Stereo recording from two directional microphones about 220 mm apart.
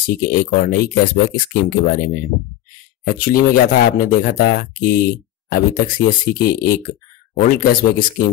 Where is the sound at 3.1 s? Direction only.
40° left (ahead or behind).